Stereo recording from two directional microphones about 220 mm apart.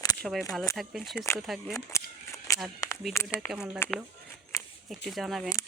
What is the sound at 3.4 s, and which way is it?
Speech, 15° left (ahead or behind).